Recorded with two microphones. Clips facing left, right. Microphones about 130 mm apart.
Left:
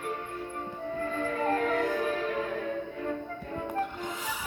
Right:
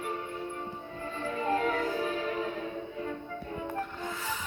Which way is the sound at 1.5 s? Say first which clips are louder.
Left 2 dB; 50° left (ahead or behind).